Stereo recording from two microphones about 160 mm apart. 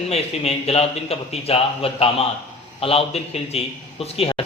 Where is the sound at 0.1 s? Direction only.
40° left (ahead or behind).